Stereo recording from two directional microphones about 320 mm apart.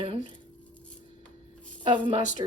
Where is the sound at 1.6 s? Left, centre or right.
Centre.